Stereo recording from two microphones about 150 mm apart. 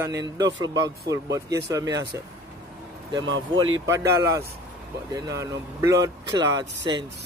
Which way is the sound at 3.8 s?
20° right (ahead or behind).